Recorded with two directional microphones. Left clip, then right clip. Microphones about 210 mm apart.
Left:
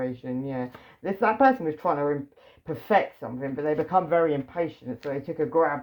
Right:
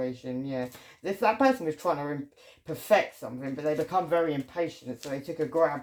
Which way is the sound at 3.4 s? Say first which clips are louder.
Left 3 dB; 45° left (ahead or behind).